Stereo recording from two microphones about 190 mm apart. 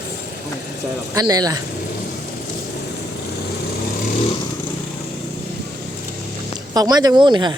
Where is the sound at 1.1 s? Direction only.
20° right (ahead or behind).